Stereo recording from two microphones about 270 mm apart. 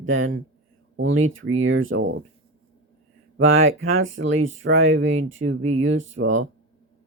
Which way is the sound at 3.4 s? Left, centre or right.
Right.